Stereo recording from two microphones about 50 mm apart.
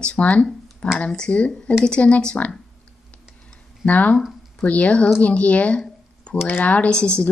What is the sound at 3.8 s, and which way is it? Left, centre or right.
Speech, left.